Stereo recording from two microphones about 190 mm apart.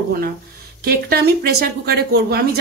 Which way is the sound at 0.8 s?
55° right (ahead or behind).